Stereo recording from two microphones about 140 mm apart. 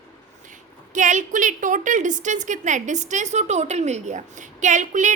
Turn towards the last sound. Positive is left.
turn(degrees=-60)  # may be behind; listen again after turning